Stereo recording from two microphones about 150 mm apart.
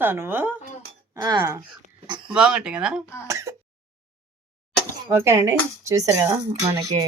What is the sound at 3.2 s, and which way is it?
Speech, 20° right (ahead or behind).